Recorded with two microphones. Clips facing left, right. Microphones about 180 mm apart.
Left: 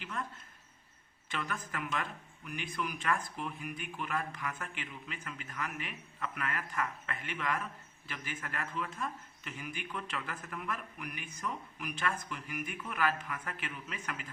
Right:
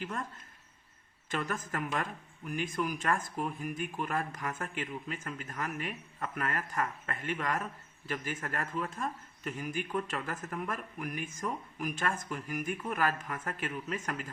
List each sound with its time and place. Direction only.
0.0 s speech: 45° right (ahead or behind)
1.3 s speech: 45° right (ahead or behind)